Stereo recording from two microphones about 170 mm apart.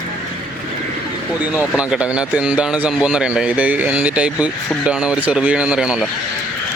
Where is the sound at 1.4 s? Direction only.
5° right (ahead or behind).